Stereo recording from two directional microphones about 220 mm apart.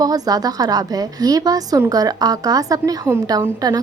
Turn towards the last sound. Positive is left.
turn(degrees=-15)  # may be behind; listen again after turning